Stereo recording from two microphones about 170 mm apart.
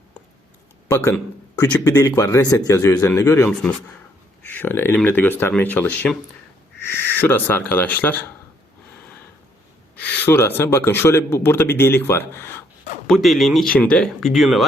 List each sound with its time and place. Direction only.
0.9 s speech: 15° left (ahead or behind)
9.9 s speech: 10° left (ahead or behind)
13.1 s speech: centre (ahead or behind)